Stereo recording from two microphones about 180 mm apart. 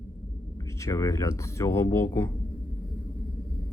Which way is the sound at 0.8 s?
15° left (ahead or behind).